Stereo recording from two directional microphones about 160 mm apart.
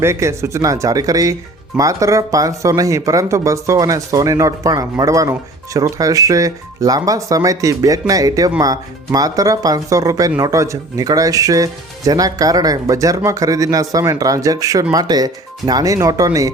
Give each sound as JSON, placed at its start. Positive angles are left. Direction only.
{"t": 0.0, "sound": "speech", "side_deg": -15}